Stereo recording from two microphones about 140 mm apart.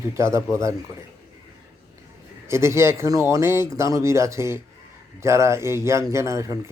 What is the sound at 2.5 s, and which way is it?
Speech, 20° right (ahead or behind).